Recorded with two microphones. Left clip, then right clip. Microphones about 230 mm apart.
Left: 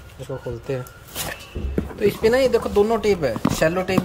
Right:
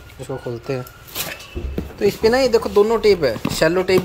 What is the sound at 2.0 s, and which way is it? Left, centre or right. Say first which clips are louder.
Speech: right 2 dB; centre.